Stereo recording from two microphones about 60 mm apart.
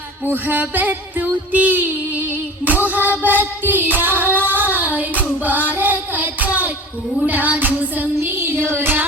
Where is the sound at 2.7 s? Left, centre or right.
Right.